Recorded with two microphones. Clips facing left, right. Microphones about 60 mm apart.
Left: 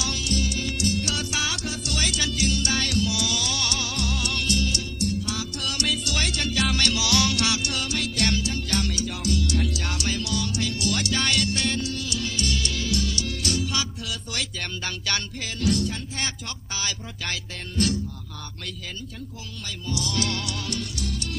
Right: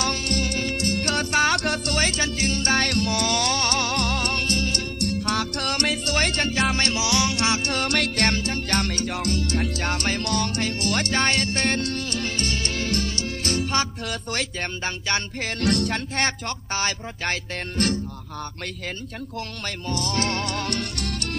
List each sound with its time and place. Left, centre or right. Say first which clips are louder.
0.0 s music: right 3 dB; right
6.1 s music: right 4 dB; right
7.9 s music: right 3 dB; right
9.3 s music: right 1 dB; right
15.4 s speech: right 1 dB; right
19.6 s speech: right 1 dB; right